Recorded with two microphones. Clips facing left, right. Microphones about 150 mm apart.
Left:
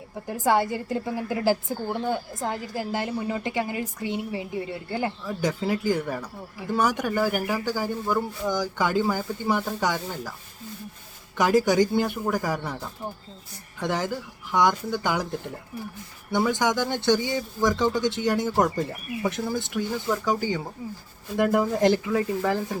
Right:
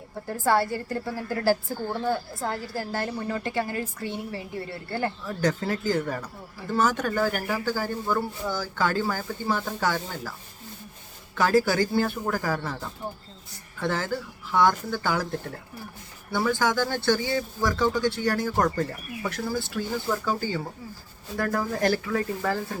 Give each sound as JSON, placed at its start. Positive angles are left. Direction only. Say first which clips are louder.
{"t": 0.3, "sound": "a woman's voice", "louder": "left 1 dB", "side_deg": 15}
{"t": 11.3, "sound": "a woman's voice", "louder": "left 2 dB", "side_deg": 15}
{"t": 13.7, "sound": "a woman's voice", "louder": "left 1 dB", "side_deg": 15}
{"t": 16.3, "sound": "a woman's voice", "louder": "left 1 dB", "side_deg": 20}